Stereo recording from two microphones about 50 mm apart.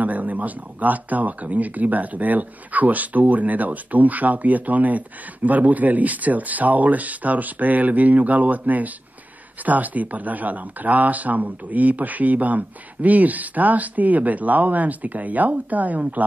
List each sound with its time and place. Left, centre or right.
0.0 s speech: right